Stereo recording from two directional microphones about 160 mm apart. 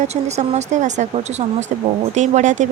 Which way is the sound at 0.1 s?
45° right (ahead or behind).